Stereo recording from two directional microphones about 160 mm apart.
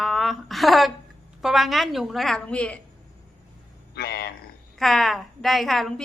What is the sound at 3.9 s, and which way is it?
Speech, 90° left.